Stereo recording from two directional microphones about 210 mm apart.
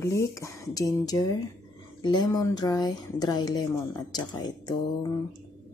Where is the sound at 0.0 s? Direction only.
15° left (ahead or behind).